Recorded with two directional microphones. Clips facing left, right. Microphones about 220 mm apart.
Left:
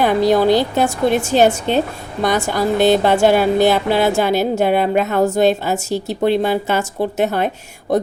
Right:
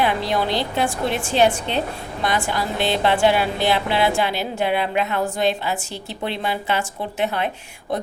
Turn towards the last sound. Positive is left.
turn(degrees=40)  # may be behind; listen again after turning